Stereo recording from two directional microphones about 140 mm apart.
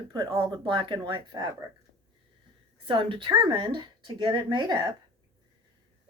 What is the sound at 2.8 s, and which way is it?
A woman's voice, 35° right (ahead or behind).